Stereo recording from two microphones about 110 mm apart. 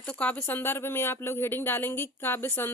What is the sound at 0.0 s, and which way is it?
A woman's voice, 10° left (ahead or behind).